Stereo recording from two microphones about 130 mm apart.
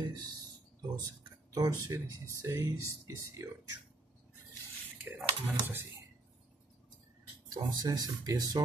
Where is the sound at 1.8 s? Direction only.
25° right (ahead or behind).